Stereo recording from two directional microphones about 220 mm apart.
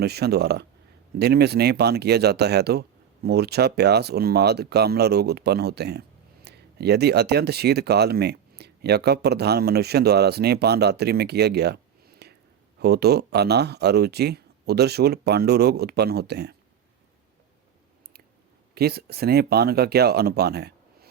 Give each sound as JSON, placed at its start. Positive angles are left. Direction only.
{"t": 0.0, "sound": "speech", "side_deg": -45}
{"t": 18.7, "sound": "speech", "side_deg": -45}